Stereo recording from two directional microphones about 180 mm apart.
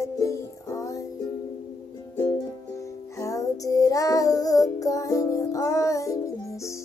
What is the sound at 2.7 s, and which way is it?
Music, 15° left (ahead or behind).